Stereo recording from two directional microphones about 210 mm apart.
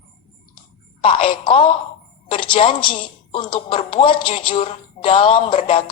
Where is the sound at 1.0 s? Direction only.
25° left (ahead or behind).